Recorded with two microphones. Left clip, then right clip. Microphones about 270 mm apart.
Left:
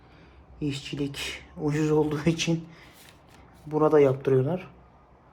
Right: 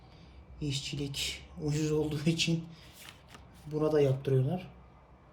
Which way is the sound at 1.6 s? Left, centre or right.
Centre.